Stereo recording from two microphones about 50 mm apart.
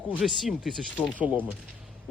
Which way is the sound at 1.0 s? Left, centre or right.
Right.